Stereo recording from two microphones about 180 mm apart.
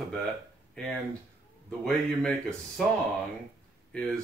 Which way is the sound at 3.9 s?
5° left (ahead or behind).